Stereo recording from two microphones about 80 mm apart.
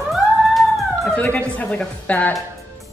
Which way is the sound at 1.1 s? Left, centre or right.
Centre.